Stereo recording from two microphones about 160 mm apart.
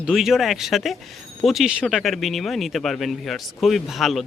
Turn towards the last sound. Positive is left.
turn(degrees=0)  # may be behind; listen again after turning